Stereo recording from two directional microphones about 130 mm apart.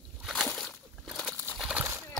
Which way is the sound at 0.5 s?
5° left (ahead or behind).